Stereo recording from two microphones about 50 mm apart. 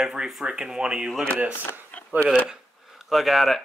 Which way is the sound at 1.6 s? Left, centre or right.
Left.